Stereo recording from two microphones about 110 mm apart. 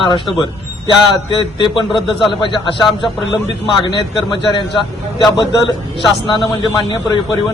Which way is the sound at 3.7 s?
45° left (ahead or behind).